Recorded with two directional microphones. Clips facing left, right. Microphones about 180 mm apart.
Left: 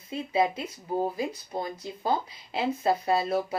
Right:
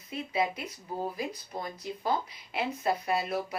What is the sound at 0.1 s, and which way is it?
Speech, 25° left (ahead or behind).